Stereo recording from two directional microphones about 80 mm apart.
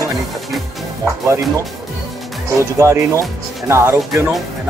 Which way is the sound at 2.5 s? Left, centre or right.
Right.